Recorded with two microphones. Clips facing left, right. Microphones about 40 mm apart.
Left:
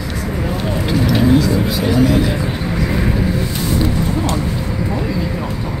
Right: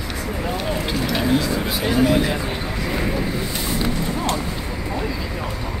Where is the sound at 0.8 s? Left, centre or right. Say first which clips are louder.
Left 9 dB; centre.